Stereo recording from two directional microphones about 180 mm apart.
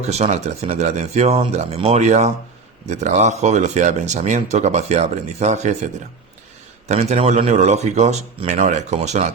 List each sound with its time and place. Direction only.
0.0 s speech: 35° right (ahead or behind)